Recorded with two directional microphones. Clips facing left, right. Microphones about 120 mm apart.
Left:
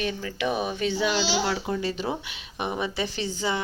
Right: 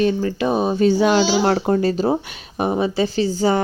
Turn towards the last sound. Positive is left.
turn(degrees=-45)  # may be behind; listen again after turning